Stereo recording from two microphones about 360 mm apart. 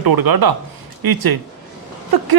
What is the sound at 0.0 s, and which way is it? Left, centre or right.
Speech, right.